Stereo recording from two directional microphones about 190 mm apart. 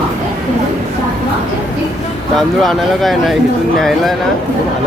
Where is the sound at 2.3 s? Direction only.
Centre (ahead or behind).